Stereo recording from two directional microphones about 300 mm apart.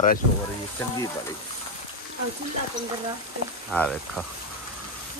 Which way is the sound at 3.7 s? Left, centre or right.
Centre.